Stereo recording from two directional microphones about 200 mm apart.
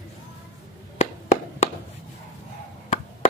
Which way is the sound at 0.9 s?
35° left (ahead or behind).